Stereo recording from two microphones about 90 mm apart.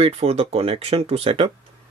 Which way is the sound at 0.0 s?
90° right.